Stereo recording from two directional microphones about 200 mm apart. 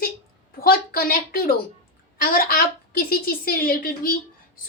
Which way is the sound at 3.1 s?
45° left (ahead or behind).